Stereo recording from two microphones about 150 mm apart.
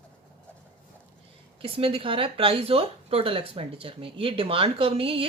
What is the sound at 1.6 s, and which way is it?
Speech, 40° right (ahead or behind).